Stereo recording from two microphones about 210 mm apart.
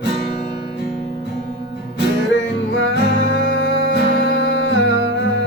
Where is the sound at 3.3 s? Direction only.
55° left (ahead or behind).